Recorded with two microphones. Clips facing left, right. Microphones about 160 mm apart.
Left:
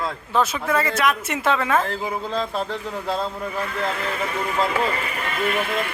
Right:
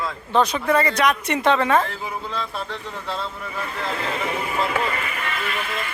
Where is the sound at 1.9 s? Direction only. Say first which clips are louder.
Left 4 dB; 40° left (ahead or behind).